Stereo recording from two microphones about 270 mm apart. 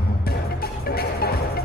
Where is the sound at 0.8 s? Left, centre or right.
Left.